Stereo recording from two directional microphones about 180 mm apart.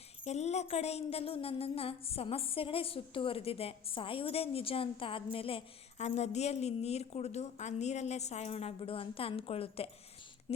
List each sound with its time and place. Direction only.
0.3 s speech: 40° left (ahead or behind)